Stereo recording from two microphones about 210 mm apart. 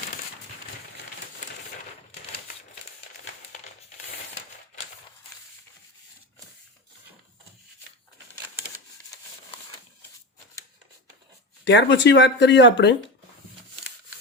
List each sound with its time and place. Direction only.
11.6 s speech: 55° left (ahead or behind)